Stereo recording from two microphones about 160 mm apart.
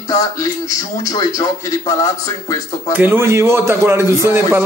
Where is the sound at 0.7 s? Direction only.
20° left (ahead or behind).